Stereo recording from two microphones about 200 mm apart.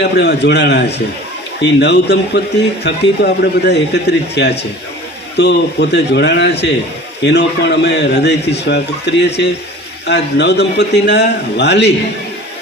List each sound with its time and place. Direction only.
0.0 s a man's voice: 55° left (ahead or behind)